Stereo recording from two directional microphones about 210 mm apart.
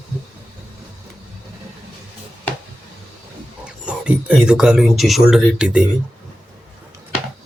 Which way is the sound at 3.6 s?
5° right (ahead or behind).